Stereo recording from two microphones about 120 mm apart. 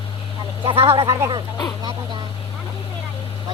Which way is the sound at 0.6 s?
45° right (ahead or behind).